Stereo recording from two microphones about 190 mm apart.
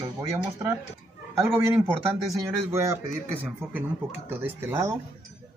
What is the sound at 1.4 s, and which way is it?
Speech, 15° right (ahead or behind).